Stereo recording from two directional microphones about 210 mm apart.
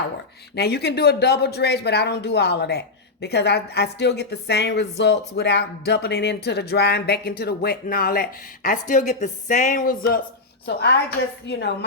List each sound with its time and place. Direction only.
0.5 s speech: 50° left (ahead or behind)
10.7 s speech: 50° left (ahead or behind)